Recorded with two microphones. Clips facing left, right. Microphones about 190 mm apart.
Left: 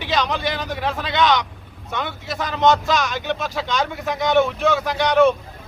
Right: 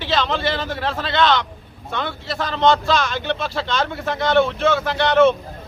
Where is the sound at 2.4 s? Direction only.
15° left (ahead or behind).